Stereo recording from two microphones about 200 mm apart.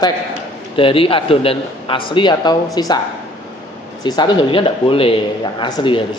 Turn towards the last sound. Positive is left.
turn(degrees=25)  # may be behind; listen again after turning